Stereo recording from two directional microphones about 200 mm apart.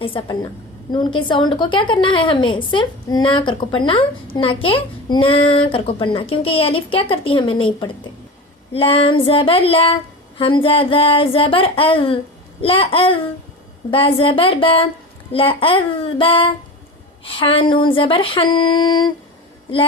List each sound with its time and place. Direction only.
0.0 s a child's voice: 25° left (ahead or behind)